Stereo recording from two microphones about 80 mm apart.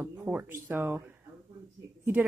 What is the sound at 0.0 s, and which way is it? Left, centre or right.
Speech, right.